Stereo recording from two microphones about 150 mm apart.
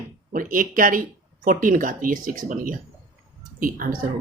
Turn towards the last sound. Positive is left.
turn(degrees=-65)  # may be behind; listen again after turning